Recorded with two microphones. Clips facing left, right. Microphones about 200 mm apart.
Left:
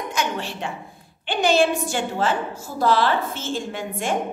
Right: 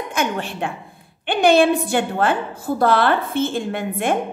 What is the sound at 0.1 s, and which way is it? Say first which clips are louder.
A woman's voice: right 5 dB; 55° right (ahead or behind).